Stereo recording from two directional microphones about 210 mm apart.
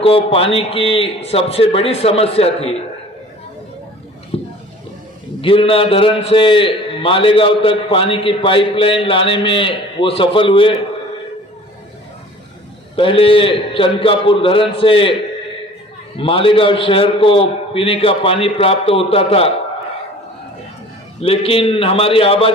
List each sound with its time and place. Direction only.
0.0 s a man's voice: 25° left (ahead or behind)
4.3 s a sound: 25° left (ahead or behind)
5.4 s a man's voice: 25° left (ahead or behind)
13.0 s a man's voice: 25° left (ahead or behind)
16.1 s a man's voice: 25° left (ahead or behind)
21.2 s a man's voice: 25° left (ahead or behind)